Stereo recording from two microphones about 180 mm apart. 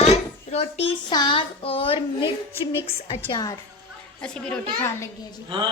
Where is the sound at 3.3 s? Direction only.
20° left (ahead or behind).